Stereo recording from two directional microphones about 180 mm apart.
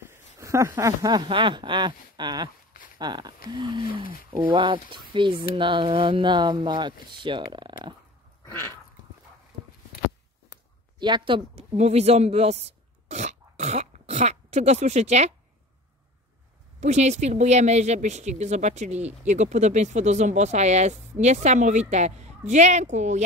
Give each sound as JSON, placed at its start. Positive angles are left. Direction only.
{"t": 0.0, "sound": "a sound", "side_deg": -15}
{"t": 3.0, "sound": "speech", "side_deg": -25}
{"t": 11.0, "sound": "a woman's voice", "side_deg": -25}
{"t": 16.8, "sound": "a woman's voice", "side_deg": -40}